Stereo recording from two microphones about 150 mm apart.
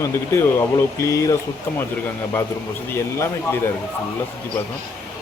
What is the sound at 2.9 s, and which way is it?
Speech, 15° left (ahead or behind).